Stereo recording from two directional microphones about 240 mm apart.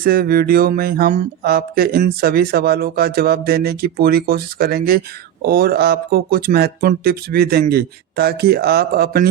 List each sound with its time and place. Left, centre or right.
0.0 s speech: right